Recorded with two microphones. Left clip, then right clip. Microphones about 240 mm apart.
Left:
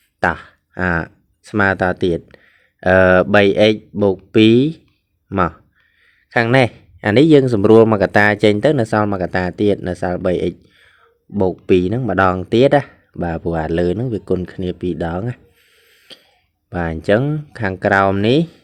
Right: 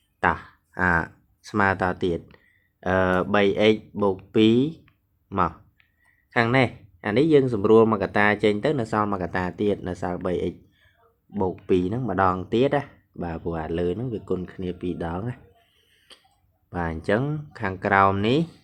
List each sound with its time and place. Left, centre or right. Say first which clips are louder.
0.2 s speech: left 5 dB; left
15.9 s cough: left 10 dB; left
16.6 s speech: left 8 dB; left